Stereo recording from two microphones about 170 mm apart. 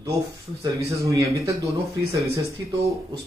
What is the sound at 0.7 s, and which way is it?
A man's voice, 20° right (ahead or behind).